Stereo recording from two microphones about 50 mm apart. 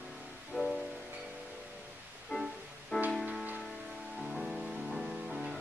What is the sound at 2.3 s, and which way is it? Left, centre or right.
Music, centre.